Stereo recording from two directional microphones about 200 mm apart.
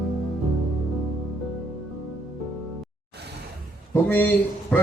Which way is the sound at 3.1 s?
55° right (ahead or behind).